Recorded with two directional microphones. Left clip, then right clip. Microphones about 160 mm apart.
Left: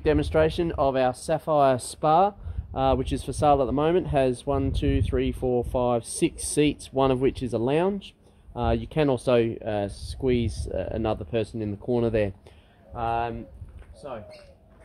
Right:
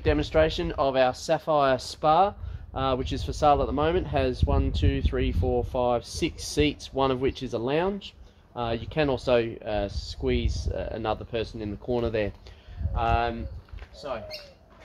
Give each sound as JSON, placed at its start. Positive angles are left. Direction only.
{"t": 0.0, "sound": "speech", "side_deg": 65}
{"t": 14.0, "sound": "speech", "side_deg": 50}